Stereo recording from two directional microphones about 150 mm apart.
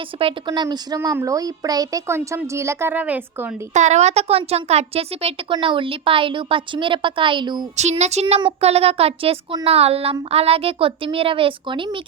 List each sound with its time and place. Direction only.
0.2 s a child's voice: 35° right (ahead or behind); by 3.5 s 10° right (ahead or behind)
3.8 s speech: 50° right (ahead or behind); by 7.6 s 30° right (ahead or behind)
7.8 s speech: 50° right (ahead or behind); by 11.9 s 35° right (ahead or behind)